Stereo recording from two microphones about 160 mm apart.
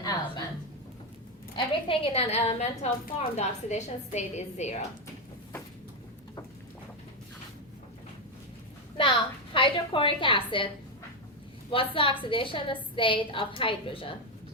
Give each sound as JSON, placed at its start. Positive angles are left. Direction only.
{"t": 0.0, "sound": "a sound", "side_deg": 25}
{"t": 1.5, "sound": "a woman's voice", "side_deg": 35}
{"t": 9.0, "sound": "a woman's voice", "side_deg": 30}
{"t": 11.7, "sound": "a woman's voice", "side_deg": 35}